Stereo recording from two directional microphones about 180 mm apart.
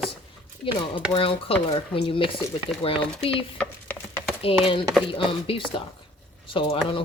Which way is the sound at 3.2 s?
30° left (ahead or behind).